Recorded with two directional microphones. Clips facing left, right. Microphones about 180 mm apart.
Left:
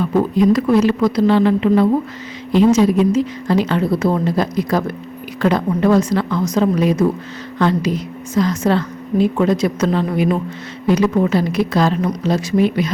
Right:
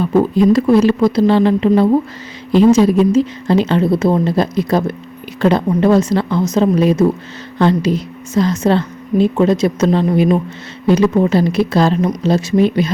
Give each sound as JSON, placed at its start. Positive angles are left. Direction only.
{"t": 0.0, "sound": "a woman's voice", "side_deg": -30}